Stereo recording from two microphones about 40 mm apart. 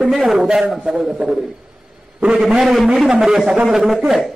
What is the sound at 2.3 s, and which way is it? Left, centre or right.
Speech, centre.